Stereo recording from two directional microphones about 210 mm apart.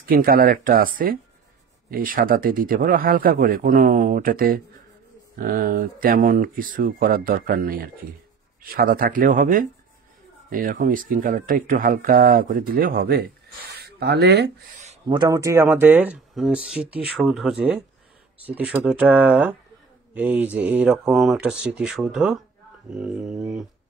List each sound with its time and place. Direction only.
0.1 s speech: 45° right (ahead or behind)
15.0 s speech: 20° right (ahead or behind); by 23.6 s centre (ahead or behind)